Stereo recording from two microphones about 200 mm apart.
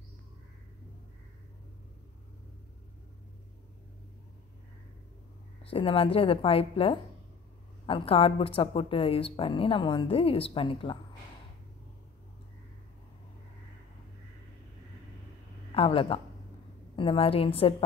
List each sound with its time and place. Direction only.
5.6 s a woman's voice: 30° left (ahead or behind)
15.7 s a woman's voice: 30° left (ahead or behind)